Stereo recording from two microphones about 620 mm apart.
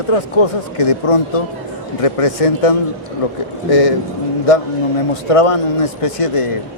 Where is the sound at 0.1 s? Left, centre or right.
Left.